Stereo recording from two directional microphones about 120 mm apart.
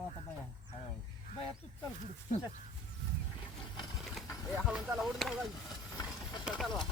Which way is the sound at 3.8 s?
Centre (ahead or behind).